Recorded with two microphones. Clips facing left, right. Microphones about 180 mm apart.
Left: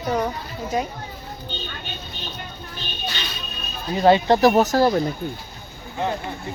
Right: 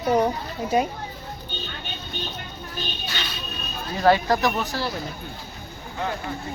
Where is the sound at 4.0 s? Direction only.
20° left (ahead or behind).